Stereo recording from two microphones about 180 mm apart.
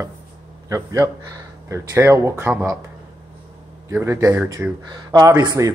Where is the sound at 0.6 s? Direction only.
15° right (ahead or behind).